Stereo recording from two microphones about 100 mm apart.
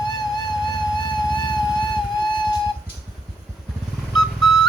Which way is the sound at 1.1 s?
50° left (ahead or behind).